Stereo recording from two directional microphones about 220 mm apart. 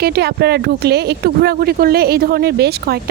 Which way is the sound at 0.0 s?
45° right (ahead or behind).